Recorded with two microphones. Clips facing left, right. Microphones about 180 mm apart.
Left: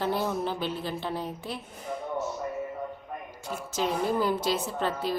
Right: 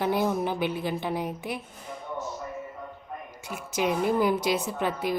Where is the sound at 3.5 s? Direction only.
15° right (ahead or behind).